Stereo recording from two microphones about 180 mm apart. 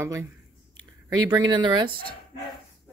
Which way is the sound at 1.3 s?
25° right (ahead or behind).